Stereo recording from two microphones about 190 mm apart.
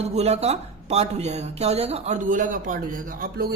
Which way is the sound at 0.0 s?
35° right (ahead or behind).